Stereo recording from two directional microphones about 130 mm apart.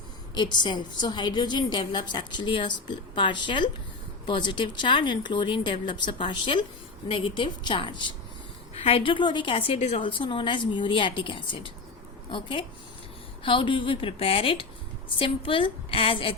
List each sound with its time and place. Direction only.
0.3 s a woman's voice: 35° left (ahead or behind)
8.7 s a woman's voice: 50° left (ahead or behind)
9.7 s a woman's voice: 60° left (ahead or behind)
10.0 s a woman's voice: 40° left (ahead or behind)